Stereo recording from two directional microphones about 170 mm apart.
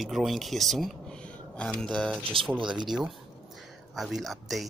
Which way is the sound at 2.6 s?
25° right (ahead or behind).